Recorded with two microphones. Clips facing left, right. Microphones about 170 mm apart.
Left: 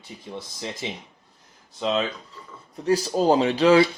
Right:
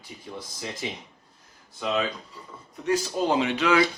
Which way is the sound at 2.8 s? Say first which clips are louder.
Left 4 dB; 35° left (ahead or behind).